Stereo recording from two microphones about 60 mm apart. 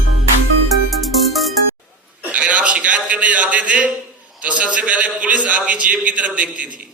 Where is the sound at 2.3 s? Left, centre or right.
Right.